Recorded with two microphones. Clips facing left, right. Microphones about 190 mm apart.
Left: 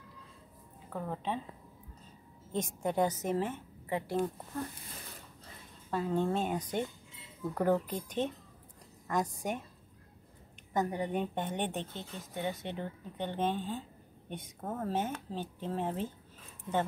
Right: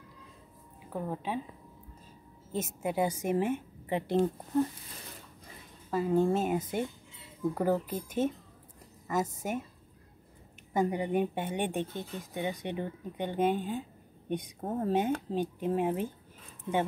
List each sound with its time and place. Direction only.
0.9 s a woman's voice: 10° right (ahead or behind)
2.5 s a woman's voice: 5° right (ahead or behind); by 4.6 s 20° right (ahead or behind)
5.9 s a woman's voice: 5° right (ahead or behind)
10.7 s a woman's voice: 10° right (ahead or behind)